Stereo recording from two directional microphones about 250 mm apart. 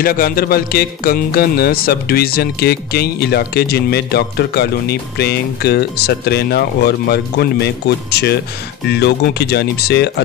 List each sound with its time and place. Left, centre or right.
0.0 s music: left